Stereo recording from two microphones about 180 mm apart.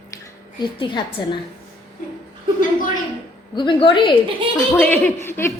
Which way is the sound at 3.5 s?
25° left (ahead or behind).